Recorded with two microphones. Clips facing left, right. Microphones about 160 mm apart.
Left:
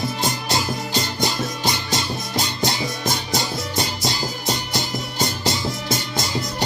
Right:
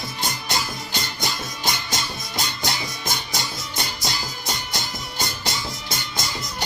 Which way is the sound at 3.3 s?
30° left (ahead or behind).